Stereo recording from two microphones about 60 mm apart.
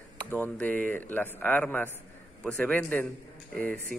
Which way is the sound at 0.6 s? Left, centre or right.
Left.